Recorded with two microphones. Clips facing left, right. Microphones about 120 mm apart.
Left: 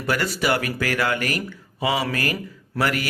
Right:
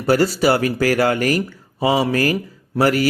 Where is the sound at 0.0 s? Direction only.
35° right (ahead or behind).